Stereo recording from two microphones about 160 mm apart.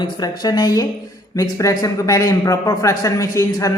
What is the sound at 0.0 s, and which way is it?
A man's voice, 25° left (ahead or behind).